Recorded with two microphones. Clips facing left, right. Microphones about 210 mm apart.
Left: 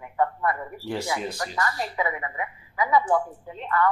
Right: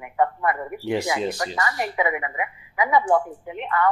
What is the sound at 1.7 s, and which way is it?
Speech, 70° right (ahead or behind).